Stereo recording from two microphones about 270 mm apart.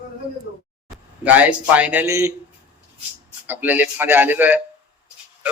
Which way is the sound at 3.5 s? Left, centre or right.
Centre.